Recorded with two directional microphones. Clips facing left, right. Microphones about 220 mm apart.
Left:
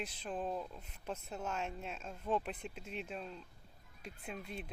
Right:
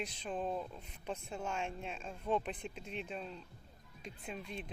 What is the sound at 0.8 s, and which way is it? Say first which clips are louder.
Speech: right 1 dB; 5° left (ahead or behind).